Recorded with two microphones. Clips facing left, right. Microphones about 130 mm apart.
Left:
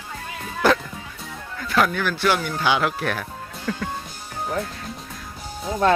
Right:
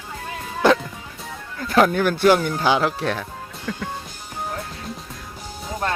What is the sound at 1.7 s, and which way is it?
Speech, 35° right (ahead or behind).